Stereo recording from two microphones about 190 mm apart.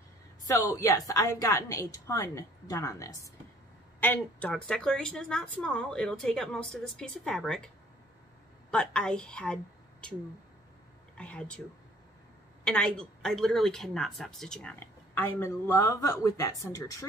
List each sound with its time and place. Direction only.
0.5 s a woman's voice: 15° left (ahead or behind)
11.1 s a woman's voice: 5° left (ahead or behind)
12.6 s speech: 5° left (ahead or behind)